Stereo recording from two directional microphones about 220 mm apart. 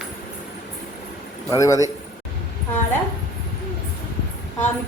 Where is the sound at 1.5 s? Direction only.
15° left (ahead or behind).